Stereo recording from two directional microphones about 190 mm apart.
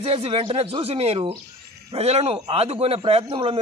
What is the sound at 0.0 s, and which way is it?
A man's voice, 30° right (ahead or behind).